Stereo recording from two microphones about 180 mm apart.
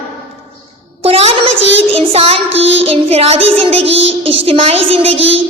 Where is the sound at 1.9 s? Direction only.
35° right (ahead or behind).